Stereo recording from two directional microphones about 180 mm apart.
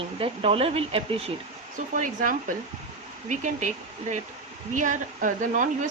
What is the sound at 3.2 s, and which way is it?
Speech, 45° right (ahead or behind).